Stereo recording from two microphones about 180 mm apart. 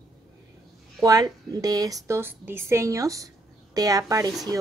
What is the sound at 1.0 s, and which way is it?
A woman's voice, 20° right (ahead or behind).